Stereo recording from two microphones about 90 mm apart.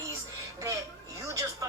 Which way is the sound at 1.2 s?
35° right (ahead or behind).